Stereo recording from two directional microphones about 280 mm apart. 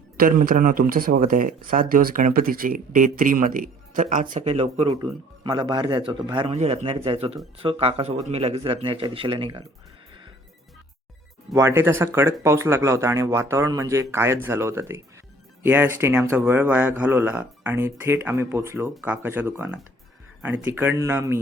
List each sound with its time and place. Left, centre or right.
0.4 s speech: right
11.5 s speech: centre